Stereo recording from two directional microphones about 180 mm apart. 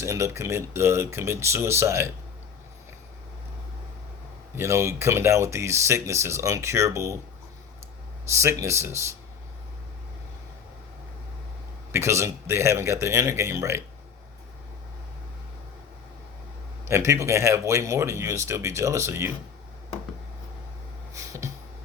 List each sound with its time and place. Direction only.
0.0 s speech: 15° right (ahead or behind)
4.5 s speech: 15° right (ahead or behind)
8.3 s speech: 15° right (ahead or behind)
11.9 s speech: 15° right (ahead or behind)
16.8 s speech: 15° right (ahead or behind)
21.1 s a sound: 15° right (ahead or behind)